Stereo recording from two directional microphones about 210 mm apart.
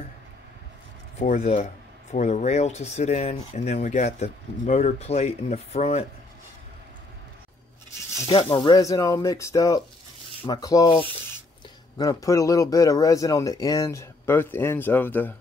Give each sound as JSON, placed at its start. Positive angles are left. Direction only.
{"t": 1.2, "sound": "speech", "side_deg": 35}
{"t": 8.5, "sound": "speech", "side_deg": 20}